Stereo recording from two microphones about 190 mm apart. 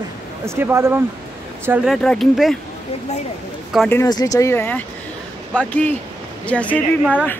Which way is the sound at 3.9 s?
15° left (ahead or behind).